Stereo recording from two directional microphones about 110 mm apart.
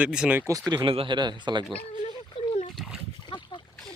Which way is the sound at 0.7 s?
40° right (ahead or behind).